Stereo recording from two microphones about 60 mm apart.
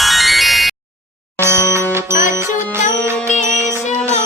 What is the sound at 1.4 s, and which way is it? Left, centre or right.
Music, right.